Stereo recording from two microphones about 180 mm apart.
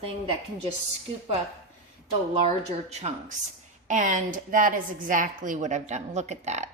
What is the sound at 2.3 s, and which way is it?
A woman's voice, 40° right (ahead or behind).